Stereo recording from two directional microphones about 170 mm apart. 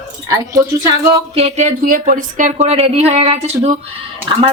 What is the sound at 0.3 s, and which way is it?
Speech, 20° right (ahead or behind).